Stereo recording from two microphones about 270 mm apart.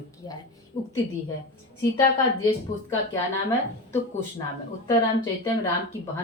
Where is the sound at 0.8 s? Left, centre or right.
Left.